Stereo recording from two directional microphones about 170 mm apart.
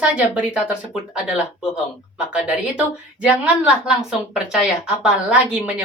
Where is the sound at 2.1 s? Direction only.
5° right (ahead or behind).